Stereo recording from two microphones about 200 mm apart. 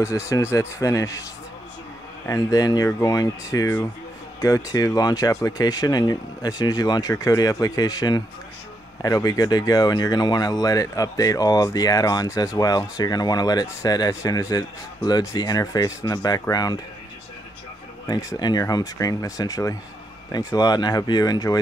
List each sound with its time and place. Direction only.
0.0 s speech: 15° left (ahead or behind)
2.2 s speech: 15° left (ahead or behind)
18.0 s speech: 20° left (ahead or behind)